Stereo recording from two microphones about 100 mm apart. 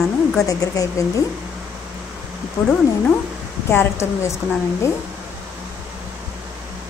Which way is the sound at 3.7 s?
30° left (ahead or behind).